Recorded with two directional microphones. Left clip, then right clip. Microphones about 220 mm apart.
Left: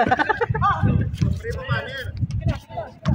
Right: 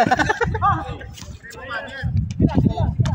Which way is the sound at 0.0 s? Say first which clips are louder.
Right 2 dB; 35° right (ahead or behind).